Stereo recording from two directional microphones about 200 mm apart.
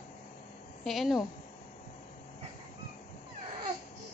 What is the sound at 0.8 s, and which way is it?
Speech, centre (ahead or behind).